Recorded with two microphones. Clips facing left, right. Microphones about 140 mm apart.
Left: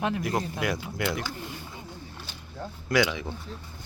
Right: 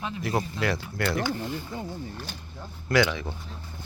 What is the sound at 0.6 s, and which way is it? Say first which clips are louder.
Speech: right 1 dB; 15° left (ahead or behind).